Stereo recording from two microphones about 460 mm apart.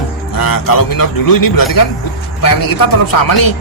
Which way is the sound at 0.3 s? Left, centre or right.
Left.